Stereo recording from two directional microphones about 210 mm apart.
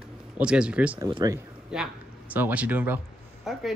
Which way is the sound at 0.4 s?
5° right (ahead or behind).